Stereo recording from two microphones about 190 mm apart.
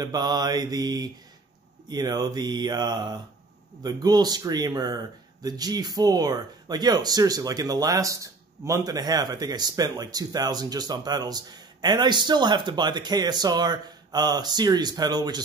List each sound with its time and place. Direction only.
0.0 s speech: 20° right (ahead or behind)